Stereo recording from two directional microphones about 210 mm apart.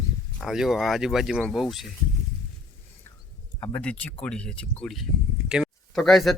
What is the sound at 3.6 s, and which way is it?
Speech, 5° left (ahead or behind).